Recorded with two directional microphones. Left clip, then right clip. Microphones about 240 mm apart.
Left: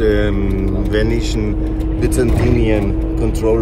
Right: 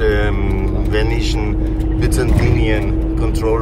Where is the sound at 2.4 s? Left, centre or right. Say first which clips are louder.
Left 2 dB; right.